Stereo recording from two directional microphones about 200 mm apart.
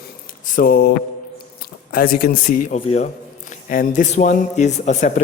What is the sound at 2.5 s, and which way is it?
A man's voice, 35° left (ahead or behind).